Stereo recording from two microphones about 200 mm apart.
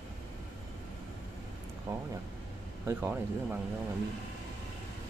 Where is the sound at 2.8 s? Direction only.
10° right (ahead or behind).